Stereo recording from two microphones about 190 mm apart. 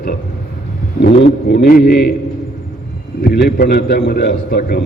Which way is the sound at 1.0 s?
65° left (ahead or behind).